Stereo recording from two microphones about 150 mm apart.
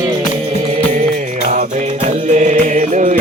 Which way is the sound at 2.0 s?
55° right (ahead or behind).